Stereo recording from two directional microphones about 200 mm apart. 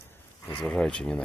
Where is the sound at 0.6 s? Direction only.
5° left (ahead or behind).